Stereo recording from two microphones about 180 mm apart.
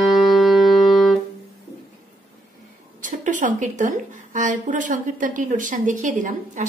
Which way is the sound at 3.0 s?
45° right (ahead or behind).